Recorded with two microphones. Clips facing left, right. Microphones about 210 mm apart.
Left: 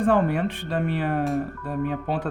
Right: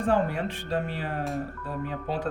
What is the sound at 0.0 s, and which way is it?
A woman's voice, 60° left (ahead or behind).